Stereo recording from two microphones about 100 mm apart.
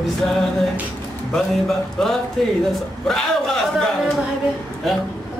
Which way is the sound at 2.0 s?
5° left (ahead or behind).